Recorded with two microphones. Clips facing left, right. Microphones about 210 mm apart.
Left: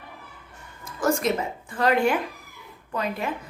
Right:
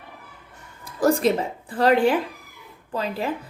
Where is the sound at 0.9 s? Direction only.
35° right (ahead or behind).